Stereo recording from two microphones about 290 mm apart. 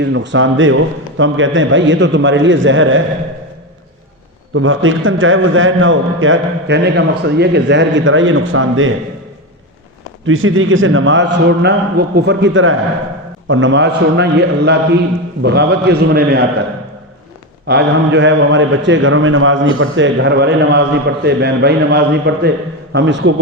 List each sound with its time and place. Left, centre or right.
0.0 s a man's voice: right
4.5 s a man's voice: right
10.2 s a man's voice: right
17.7 s a man's voice: right